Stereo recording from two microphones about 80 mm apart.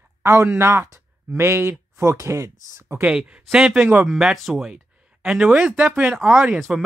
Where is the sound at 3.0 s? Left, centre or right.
Centre.